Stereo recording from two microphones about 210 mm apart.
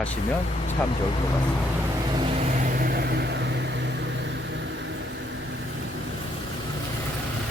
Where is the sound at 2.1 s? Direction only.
25° right (ahead or behind); by 4.9 s 55° right (ahead or behind).